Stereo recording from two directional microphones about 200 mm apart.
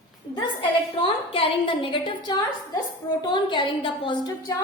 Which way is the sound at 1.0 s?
25° left (ahead or behind).